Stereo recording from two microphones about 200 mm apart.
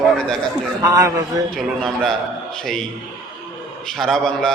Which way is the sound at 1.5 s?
Centre (ahead or behind).